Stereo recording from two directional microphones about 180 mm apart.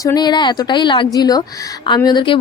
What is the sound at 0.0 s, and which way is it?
A woman's voice, 20° left (ahead or behind).